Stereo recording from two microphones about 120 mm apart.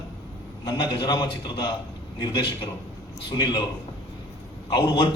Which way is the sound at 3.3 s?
40° left (ahead or behind).